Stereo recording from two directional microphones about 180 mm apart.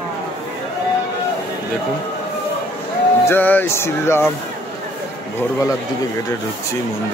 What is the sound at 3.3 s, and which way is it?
Speech, 10° left (ahead or behind).